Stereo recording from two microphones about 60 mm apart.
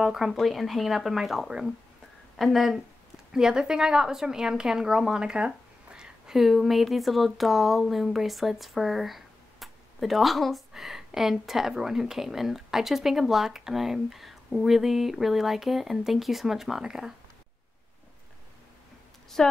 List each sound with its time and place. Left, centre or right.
0.0 s a woman's voice: centre
3.3 s a woman's voice: centre
19.4 s a woman's voice: centre